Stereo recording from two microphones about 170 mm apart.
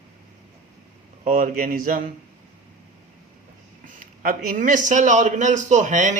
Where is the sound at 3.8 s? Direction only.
55° right (ahead or behind).